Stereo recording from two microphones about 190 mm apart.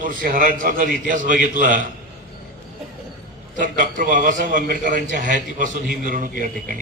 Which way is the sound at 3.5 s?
45° right (ahead or behind).